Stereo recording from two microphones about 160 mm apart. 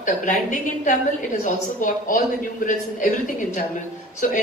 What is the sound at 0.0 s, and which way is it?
Speech, 55° left (ahead or behind).